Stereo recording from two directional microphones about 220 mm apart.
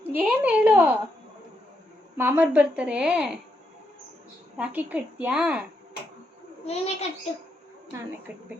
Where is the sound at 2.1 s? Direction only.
10° right (ahead or behind).